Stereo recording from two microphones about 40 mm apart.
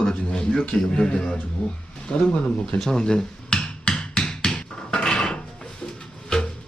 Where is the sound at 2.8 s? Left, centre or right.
Centre.